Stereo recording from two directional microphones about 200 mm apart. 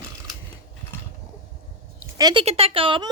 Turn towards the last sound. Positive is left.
turn(degrees=-25)  # may be behind; listen again after turning